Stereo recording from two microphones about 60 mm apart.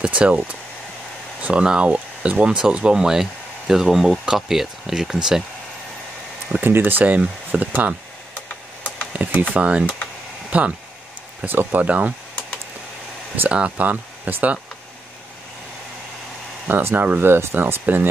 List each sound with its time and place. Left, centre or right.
0.0 s speech: right
6.6 s speech: right
9.1 s speech: right
13.5 s speech: right
16.6 s speech: right